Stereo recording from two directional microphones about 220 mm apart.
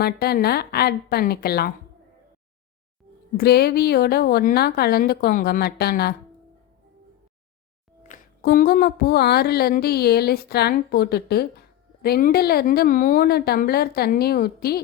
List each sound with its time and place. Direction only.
0.0 s speech: 45° left (ahead or behind)
3.3 s speech: 45° left (ahead or behind)
8.0 s speech: 40° left (ahead or behind)